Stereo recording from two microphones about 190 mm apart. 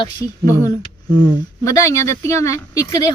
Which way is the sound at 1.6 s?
15° left (ahead or behind).